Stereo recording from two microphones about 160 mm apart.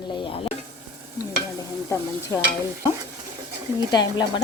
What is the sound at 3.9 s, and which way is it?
Stir, 25° left (ahead or behind).